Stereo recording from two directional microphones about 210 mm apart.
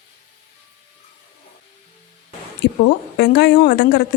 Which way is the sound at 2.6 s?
55° left (ahead or behind).